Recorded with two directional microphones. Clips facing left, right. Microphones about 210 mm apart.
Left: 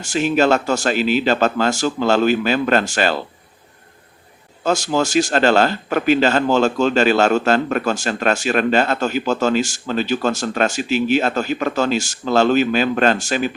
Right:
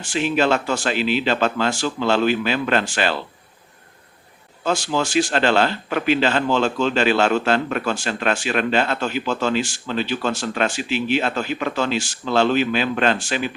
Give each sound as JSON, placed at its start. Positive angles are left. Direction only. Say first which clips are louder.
{"t": 0.0, "sound": "a man's voice", "louder": "left 3 dB", "side_deg": 45}
{"t": 4.6, "sound": "a man's voice", "louder": "left 3 dB", "side_deg": 40}